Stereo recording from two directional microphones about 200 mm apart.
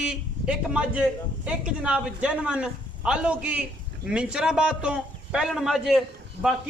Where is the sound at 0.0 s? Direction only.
5° right (ahead or behind).